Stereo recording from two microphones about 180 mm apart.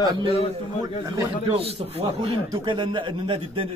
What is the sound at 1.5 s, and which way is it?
A man's voice, 35° right (ahead or behind).